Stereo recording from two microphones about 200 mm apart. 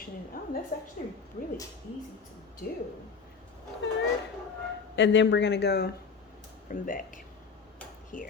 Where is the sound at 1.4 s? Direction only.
40° left (ahead or behind).